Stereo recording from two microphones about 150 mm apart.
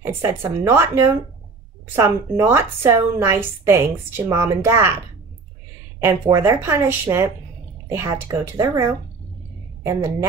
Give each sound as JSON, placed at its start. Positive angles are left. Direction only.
{"t": 0.0, "sound": "a woman's voice", "side_deg": -15}
{"t": 6.0, "sound": "a woman's voice", "side_deg": -20}